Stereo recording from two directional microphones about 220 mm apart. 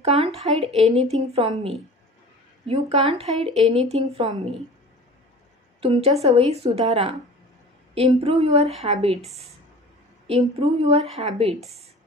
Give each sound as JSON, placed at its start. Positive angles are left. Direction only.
{"t": 0.0, "sound": "speech", "side_deg": -30}
{"t": 0.8, "sound": "speech", "side_deg": 0}
{"t": 1.3, "sound": "speech", "side_deg": -25}
{"t": 5.8, "sound": "a woman's voice", "side_deg": -25}